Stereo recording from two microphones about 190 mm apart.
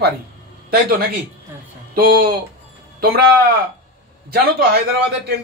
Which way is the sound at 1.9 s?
50° right (ahead or behind).